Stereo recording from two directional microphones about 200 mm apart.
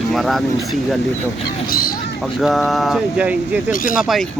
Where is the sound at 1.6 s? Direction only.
45° left (ahead or behind).